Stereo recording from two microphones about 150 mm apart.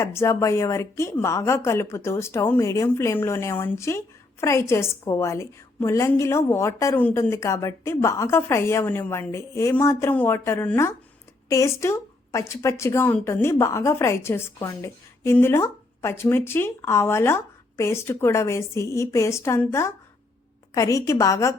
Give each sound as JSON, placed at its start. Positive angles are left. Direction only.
{"t": 0.0, "sound": "a woman's voice", "side_deg": 20}